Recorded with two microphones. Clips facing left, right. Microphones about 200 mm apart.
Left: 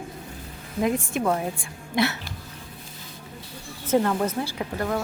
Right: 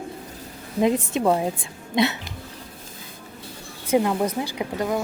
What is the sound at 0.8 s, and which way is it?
A woman's voice, 20° right (ahead or behind).